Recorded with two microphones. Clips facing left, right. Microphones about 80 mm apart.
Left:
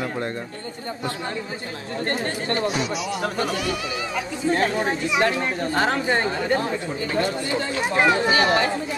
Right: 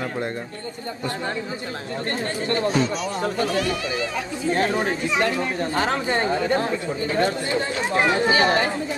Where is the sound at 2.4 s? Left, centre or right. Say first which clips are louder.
Right 4 dB; left.